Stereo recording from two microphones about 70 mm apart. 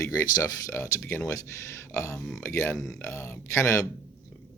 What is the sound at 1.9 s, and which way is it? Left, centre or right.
Speech, left.